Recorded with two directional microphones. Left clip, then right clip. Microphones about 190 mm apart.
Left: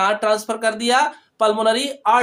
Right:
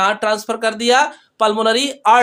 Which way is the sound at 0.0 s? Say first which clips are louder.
Right 1 dB; 25° right (ahead or behind).